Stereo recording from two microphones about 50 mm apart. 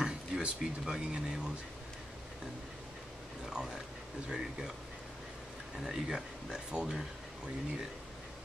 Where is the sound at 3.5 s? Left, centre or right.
Centre.